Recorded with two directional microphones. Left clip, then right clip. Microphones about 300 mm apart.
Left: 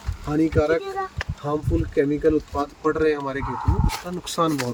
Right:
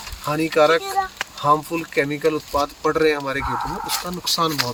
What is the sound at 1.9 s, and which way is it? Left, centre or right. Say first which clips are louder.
Speech: even; right.